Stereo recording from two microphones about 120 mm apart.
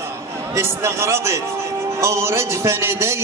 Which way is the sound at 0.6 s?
25° right (ahead or behind).